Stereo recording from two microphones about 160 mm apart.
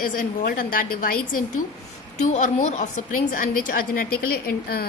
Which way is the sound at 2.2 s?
50° left (ahead or behind).